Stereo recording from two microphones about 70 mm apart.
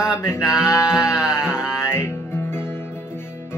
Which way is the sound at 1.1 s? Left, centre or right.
Left.